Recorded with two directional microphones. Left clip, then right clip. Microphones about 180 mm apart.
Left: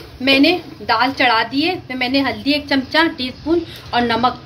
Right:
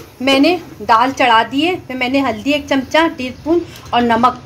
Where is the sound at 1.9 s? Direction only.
20° right (ahead or behind).